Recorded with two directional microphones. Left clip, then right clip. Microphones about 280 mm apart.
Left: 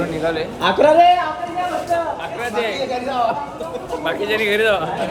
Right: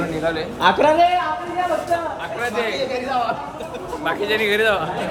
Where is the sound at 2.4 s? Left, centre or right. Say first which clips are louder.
Even; centre.